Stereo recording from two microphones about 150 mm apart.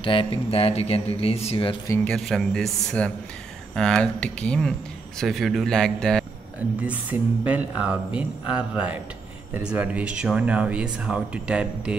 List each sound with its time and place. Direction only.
0.0 s speech: 35° left (ahead or behind)
2.0 s speech: 5° left (ahead or behind)
6.8 s speech: 10° right (ahead or behind)